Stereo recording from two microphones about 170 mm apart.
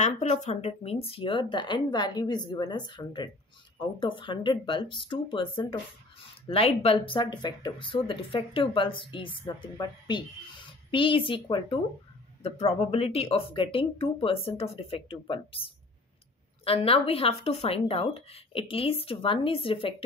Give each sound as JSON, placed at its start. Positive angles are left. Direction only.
{"t": 0.0, "sound": "speech", "side_deg": 45}
{"t": 12.4, "sound": "speech", "side_deg": 40}